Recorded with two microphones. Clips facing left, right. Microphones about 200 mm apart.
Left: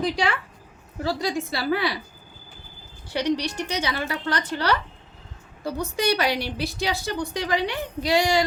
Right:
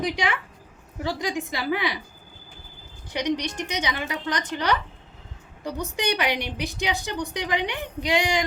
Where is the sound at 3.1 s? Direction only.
15° right (ahead or behind).